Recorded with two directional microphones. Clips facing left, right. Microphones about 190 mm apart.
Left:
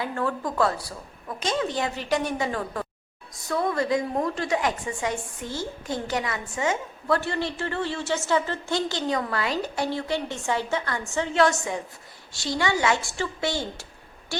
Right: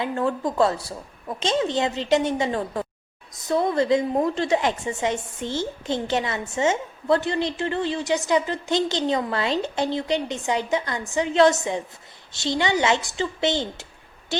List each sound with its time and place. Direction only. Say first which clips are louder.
0.0 s a woman's voice: right 4 dB; 20° right (ahead or behind)